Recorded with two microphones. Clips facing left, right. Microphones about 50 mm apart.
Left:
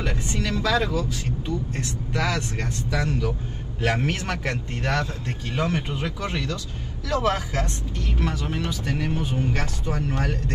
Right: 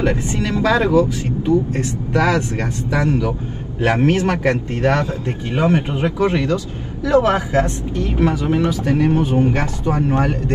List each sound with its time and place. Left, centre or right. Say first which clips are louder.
0.0 s speech: right 8 dB; right